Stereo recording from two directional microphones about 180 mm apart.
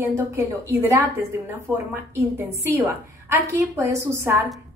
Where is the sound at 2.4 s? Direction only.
15° right (ahead or behind).